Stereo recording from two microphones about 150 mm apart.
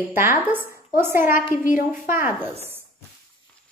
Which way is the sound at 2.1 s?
15° right (ahead or behind).